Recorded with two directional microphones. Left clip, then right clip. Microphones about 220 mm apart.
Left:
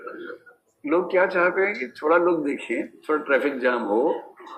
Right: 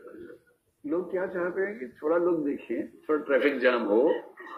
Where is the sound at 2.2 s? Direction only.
20° left (ahead or behind).